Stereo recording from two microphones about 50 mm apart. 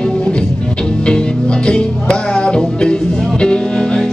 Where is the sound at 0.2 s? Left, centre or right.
Left.